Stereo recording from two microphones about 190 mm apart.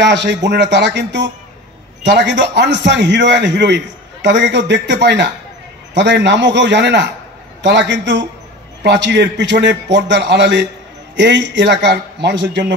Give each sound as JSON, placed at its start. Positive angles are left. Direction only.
{"t": 0.0, "sound": "a man's voice", "side_deg": -65}